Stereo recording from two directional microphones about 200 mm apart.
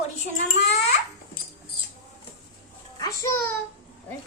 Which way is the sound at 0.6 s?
35° left (ahead or behind).